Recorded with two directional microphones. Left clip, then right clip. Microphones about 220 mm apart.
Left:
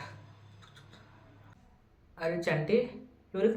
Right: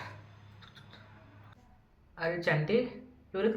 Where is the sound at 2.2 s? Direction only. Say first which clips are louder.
Right 1 dB; 5° left (ahead or behind).